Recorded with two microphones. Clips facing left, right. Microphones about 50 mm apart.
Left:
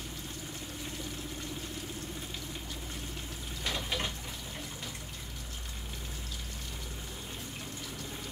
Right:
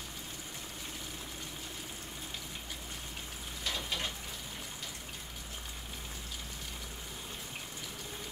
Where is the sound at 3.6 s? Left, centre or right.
Left.